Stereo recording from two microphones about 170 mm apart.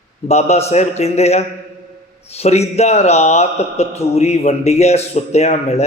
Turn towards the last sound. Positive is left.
turn(degrees=40)  # may be behind; listen again after turning